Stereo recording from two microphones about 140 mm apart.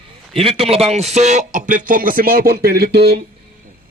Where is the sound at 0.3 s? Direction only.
45° right (ahead or behind); by 2.9 s 90° right.